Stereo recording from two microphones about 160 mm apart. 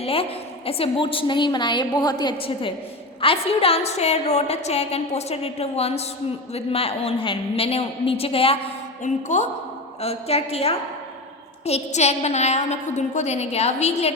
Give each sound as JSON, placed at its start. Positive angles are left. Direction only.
{"t": 0.0, "sound": "a woman's voice", "side_deg": 35}
{"t": 9.0, "sound": "a woman's voice", "side_deg": 50}